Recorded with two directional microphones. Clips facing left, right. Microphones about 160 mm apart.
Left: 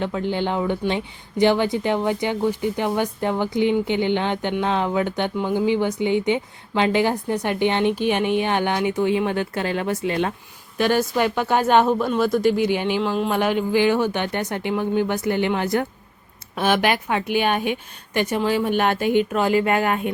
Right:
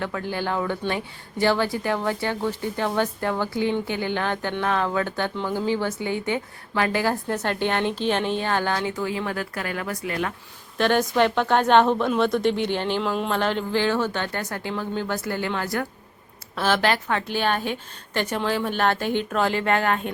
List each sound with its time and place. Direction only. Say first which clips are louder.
0.0 s speech: left 4 dB; 20° left (ahead or behind)
10.8 s speech: even; 5° left (ahead or behind)